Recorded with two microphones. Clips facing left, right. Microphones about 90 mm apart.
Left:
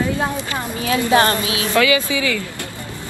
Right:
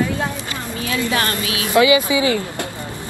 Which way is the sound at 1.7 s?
20° right (ahead or behind).